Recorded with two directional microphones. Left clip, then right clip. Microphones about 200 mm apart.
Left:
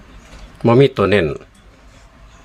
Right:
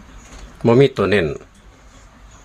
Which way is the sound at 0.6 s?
15° left (ahead or behind).